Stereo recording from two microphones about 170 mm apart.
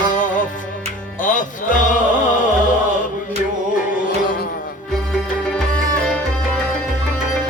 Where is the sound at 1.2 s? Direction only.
50° left (ahead or behind).